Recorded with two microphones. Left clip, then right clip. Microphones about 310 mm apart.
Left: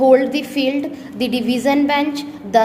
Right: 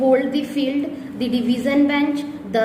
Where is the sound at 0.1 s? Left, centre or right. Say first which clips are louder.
Left 4 dB; left.